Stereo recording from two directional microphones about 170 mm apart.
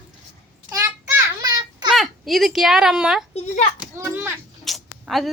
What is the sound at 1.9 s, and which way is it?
Speech, centre (ahead or behind).